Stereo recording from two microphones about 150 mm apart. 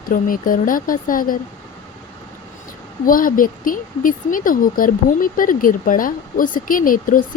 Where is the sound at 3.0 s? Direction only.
65° left (ahead or behind).